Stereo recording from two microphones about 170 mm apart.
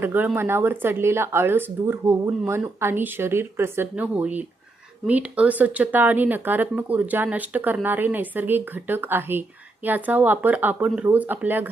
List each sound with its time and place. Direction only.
0.0 s speech: 10° right (ahead or behind)